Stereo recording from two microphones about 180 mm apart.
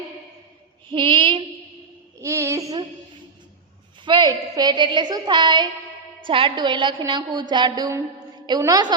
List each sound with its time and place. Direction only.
0.9 s female singing: 25° right (ahead or behind)
2.2 s a sound: 15° right (ahead or behind)
4.0 s a woman's voice: 25° right (ahead or behind)